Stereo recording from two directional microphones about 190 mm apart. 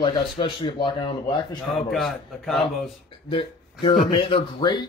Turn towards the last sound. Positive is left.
turn(degrees=25)  # may be behind; listen again after turning